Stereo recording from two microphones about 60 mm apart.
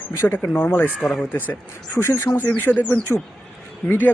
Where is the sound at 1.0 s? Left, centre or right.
Centre.